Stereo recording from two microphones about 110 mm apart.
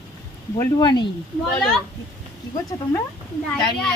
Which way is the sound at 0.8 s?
45° left (ahead or behind).